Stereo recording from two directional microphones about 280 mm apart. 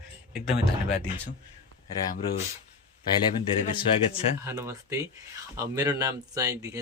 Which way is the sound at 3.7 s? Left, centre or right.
Centre.